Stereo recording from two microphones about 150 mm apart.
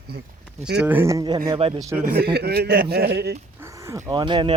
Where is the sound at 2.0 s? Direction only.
85° right.